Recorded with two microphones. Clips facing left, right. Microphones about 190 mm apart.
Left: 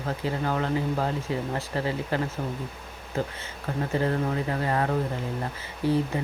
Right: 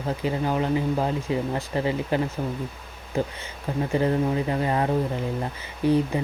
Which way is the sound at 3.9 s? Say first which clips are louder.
Right 4 dB; 15° right (ahead or behind).